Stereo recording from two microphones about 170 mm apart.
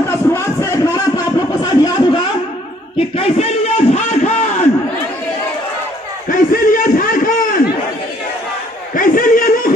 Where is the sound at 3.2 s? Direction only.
40° left (ahead or behind).